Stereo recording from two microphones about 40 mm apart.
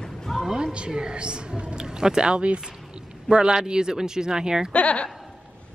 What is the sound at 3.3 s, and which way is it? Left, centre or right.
Speech, centre.